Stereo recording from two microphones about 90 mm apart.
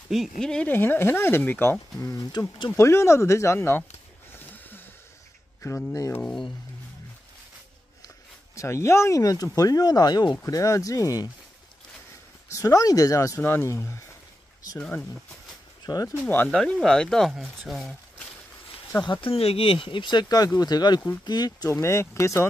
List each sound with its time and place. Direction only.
0.1 s speech: 5° left (ahead or behind)
0.7 s speech: 25° left (ahead or behind)
2.4 s speech: 50° left (ahead or behind)
2.8 s speech: 30° left (ahead or behind)
4.3 s a sound: 20° left (ahead or behind)
5.6 s speech: 35° left (ahead or behind)
8.5 s speech: 30° left (ahead or behind)
12.4 s speech: 35° left (ahead or behind)
13.4 s speech: 25° left (ahead or behind)
14.8 s speech: 15° left (ahead or behind)
15.8 s speech: 45° left (ahead or behind)
16.4 s speech: 5° left (ahead or behind)
19.2 s speech: 90° left; by 21.6 s 50° left (ahead or behind)
21.6 s speech: 30° left (ahead or behind)